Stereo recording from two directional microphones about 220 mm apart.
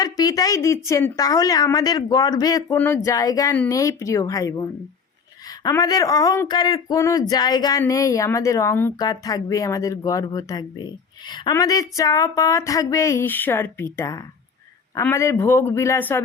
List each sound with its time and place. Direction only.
0.0 s speech: 15° left (ahead or behind)